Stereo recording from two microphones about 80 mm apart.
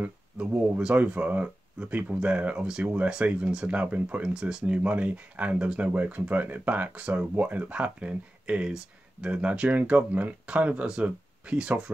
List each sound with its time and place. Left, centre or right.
0.0 s speech: centre
4.3 s speech: centre